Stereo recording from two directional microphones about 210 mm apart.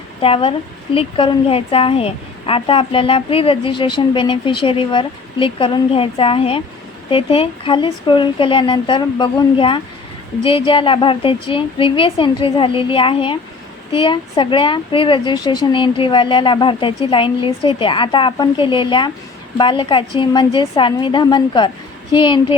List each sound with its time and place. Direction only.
0.2 s a woman's voice: 25° left (ahead or behind)